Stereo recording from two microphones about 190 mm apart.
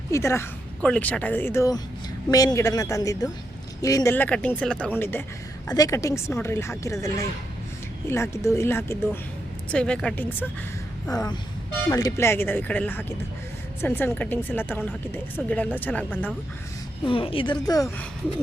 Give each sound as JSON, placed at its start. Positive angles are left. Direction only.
{"t": 0.1, "sound": "a woman's voice", "side_deg": 15}
{"t": 17.1, "sound": "a woman's voice", "side_deg": 30}